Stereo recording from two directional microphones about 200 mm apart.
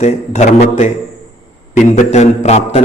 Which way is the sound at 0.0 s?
35° left (ahead or behind).